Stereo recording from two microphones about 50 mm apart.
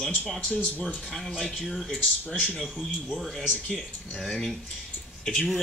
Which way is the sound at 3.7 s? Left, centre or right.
Centre.